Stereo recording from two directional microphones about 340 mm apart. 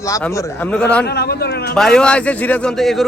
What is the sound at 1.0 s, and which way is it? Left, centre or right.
Speech, left.